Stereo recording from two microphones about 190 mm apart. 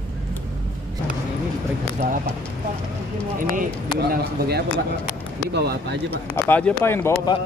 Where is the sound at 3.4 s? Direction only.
50° right (ahead or behind).